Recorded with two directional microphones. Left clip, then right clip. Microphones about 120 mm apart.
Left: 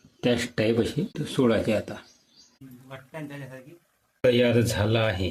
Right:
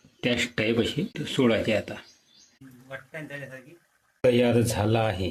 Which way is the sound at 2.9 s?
10° left (ahead or behind).